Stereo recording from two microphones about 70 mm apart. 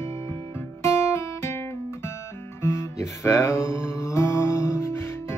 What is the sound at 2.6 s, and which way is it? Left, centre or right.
Guitar, left.